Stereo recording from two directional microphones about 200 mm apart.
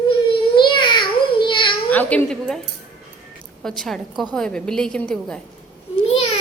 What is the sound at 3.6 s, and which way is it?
A woman's voice, centre (ahead or behind).